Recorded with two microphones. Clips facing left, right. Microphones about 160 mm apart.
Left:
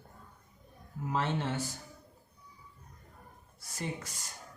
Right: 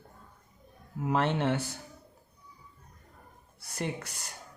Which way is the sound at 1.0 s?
65° right (ahead or behind).